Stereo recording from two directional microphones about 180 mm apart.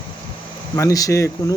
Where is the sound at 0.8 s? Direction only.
20° left (ahead or behind).